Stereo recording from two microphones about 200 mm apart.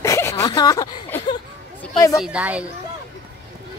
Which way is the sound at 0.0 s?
15° left (ahead or behind).